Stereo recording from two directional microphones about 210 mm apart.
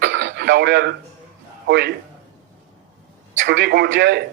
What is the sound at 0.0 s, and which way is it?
Radio, 60° right (ahead or behind).